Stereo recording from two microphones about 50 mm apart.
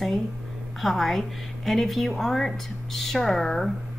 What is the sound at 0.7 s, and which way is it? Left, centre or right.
A woman's voice, centre.